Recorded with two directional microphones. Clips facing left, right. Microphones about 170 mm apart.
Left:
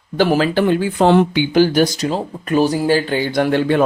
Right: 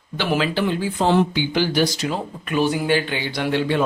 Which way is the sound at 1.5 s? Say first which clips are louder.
Left 6 dB; 45° left (ahead or behind).